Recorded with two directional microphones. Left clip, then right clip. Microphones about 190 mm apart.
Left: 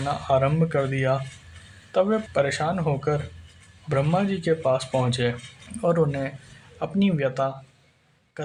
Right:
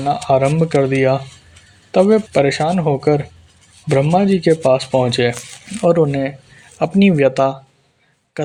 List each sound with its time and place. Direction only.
0.0 s speech: 40° right (ahead or behind)